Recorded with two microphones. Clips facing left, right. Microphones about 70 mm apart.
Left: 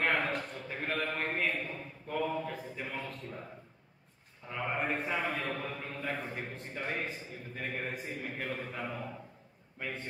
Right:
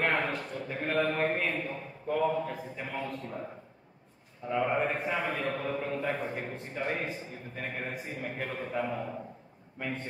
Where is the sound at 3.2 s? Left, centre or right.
Right.